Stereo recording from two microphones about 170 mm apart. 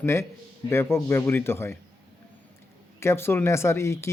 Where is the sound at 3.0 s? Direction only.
15° left (ahead or behind).